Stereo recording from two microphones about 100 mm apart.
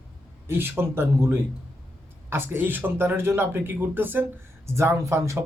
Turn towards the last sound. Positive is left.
turn(degrees=-25)  # may be behind; listen again after turning